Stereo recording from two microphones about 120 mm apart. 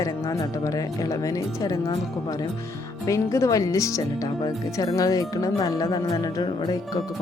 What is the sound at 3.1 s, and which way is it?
Speech, 25° left (ahead or behind).